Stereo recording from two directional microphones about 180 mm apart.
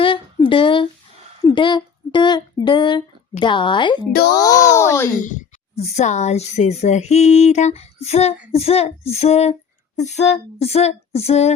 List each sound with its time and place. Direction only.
0.0 s a sound: 30° left (ahead or behind)
1.5 s a child's voice: 25° left (ahead or behind)
5.2 s speech: 45° left (ahead or behind)